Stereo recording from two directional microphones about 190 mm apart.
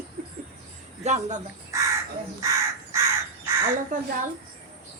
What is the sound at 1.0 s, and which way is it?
Speech, 35° right (ahead or behind).